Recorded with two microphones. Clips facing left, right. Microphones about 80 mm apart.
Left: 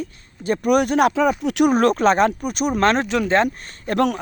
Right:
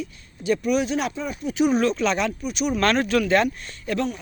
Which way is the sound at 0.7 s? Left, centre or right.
Left.